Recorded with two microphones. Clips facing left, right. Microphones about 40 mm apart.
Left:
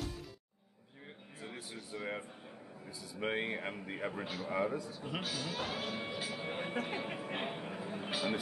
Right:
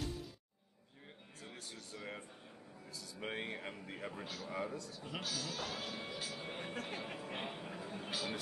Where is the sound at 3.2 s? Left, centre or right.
Left.